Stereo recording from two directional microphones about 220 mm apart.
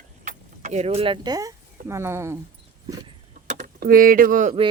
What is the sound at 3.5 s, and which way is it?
Speech, 35° right (ahead or behind).